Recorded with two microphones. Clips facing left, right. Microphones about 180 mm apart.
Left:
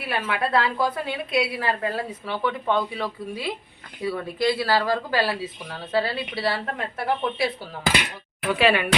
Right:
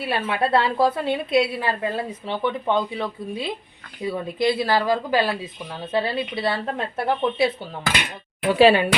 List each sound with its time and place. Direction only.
0.0 s a woman's voice: 30° right (ahead or behind)